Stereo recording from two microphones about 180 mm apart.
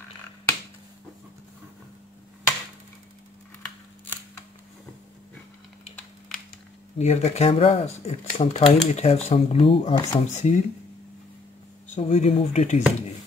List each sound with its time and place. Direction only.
7.0 s speech: 35° left (ahead or behind)
11.9 s speech: 40° left (ahead or behind)